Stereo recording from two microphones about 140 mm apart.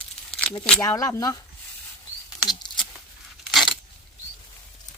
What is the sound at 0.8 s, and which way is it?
Speech, 25° left (ahead or behind).